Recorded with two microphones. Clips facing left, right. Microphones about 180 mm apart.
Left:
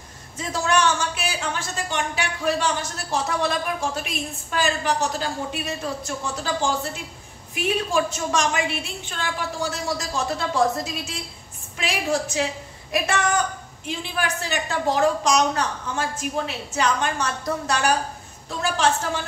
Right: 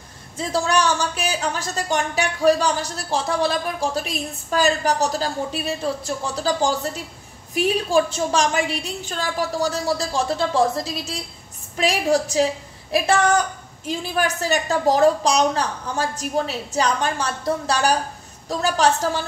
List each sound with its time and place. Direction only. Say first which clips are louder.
0.4 s speech: right 2 dB; 35° right (ahead or behind)
13.8 s speech: right 4 dB; 40° right (ahead or behind)